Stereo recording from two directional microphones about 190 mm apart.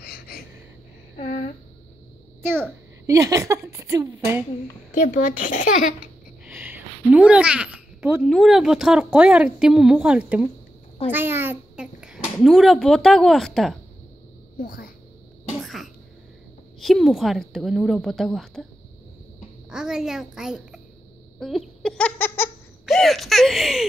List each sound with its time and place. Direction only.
0.0 s a sound: 55° left (ahead or behind)
1.1 s a sound: 40° left (ahead or behind)
3.1 s a woman's voice: 15° right (ahead or behind)
4.9 s speech: 40° left (ahead or behind)
6.4 s a woman's voice: 10° right (ahead or behind)
14.6 s speech: 50° left (ahead or behind)
15.6 s cough: centre (ahead or behind)
16.8 s speech: centre (ahead or behind)
19.7 s speech: 5° right (ahead or behind)
21.4 s a sound: centre (ahead or behind)
22.8 s speech: centre (ahead or behind)